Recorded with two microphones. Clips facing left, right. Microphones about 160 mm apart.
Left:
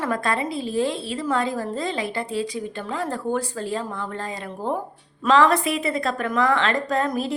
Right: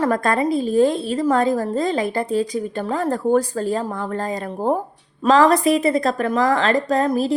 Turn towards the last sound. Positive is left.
turn(degrees=-35)  # may be behind; listen again after turning